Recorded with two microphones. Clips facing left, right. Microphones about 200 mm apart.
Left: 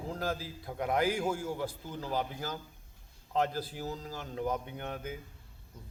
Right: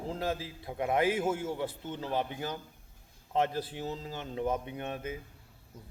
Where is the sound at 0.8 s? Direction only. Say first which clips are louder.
Right 2 dB; 25° right (ahead or behind).